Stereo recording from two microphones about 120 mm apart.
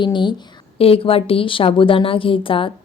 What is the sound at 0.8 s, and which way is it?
A woman's voice, 50° left (ahead or behind).